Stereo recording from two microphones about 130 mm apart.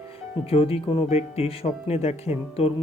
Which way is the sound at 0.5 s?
50° left (ahead or behind).